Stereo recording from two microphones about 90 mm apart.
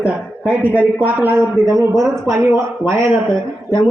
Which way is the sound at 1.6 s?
40° right (ahead or behind).